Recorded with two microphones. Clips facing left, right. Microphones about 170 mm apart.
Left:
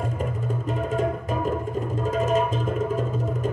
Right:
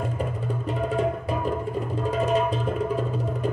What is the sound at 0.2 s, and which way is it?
Music, 40° left (ahead or behind).